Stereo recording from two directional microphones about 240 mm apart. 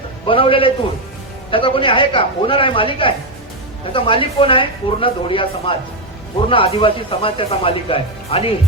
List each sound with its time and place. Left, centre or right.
0.3 s speech: left